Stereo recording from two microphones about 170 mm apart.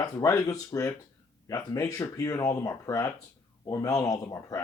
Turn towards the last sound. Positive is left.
turn(degrees=20)  # may be behind; listen again after turning